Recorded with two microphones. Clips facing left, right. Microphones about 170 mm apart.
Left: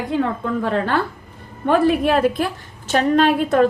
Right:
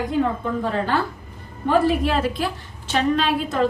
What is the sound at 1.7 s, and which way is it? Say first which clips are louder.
A woman's voice: left 3 dB; 60° left (ahead or behind).